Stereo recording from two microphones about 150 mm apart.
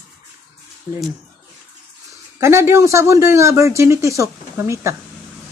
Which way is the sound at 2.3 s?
15° right (ahead or behind).